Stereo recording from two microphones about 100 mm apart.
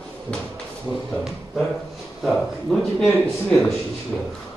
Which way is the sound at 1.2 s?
5° right (ahead or behind).